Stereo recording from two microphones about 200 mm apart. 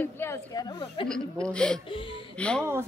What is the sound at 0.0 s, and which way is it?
A woman's voice, 10° left (ahead or behind).